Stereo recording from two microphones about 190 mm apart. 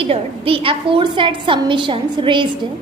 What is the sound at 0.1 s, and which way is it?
A child's voice, 30° right (ahead or behind).